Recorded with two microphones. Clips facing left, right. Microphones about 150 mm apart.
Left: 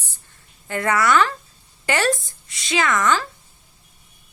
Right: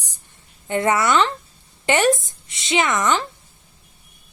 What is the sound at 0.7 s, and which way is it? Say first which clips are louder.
A woman's voice: right 1 dB; 20° right (ahead or behind).